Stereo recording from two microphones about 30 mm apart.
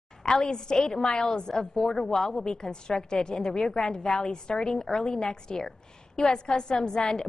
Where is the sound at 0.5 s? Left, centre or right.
Left.